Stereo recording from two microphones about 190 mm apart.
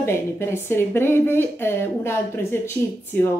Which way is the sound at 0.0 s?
15° left (ahead or behind).